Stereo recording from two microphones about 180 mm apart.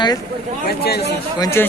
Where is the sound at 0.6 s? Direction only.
60° left (ahead or behind).